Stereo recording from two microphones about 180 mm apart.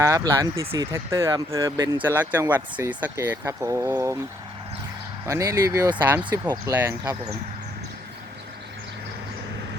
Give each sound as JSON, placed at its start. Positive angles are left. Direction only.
{"t": 0.0, "sound": "speech", "side_deg": -15}
{"t": 5.2, "sound": "speech", "side_deg": -15}